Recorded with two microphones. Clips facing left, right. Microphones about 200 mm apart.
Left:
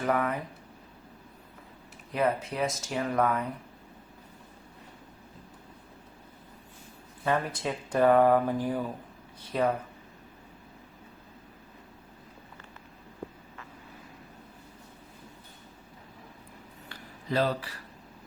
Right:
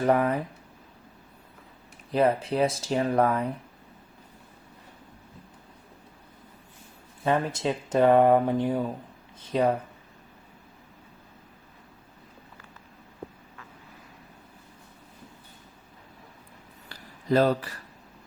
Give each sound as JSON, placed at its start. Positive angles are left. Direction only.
{"t": 0.0, "sound": "speech", "side_deg": -30}
{"t": 2.1, "sound": "speech", "side_deg": -30}
{"t": 7.3, "sound": "speech", "side_deg": -25}
{"t": 16.9, "sound": "a sound", "side_deg": -45}